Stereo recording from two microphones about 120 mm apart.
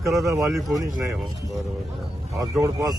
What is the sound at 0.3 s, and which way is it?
Speech, 25° right (ahead or behind).